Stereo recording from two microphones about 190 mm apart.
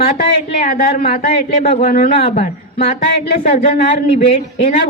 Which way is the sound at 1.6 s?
35° left (ahead or behind).